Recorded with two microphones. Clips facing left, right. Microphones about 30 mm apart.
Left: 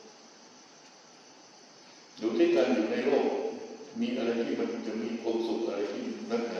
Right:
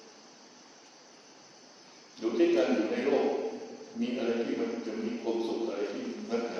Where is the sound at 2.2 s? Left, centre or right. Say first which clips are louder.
Left 1 dB; centre.